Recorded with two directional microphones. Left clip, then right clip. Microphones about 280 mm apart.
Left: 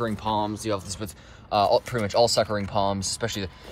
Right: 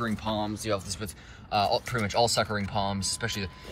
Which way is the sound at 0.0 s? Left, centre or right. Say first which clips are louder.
Left 5 dB; centre.